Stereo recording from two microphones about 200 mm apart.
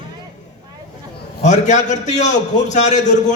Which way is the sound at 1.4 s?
35° left (ahead or behind).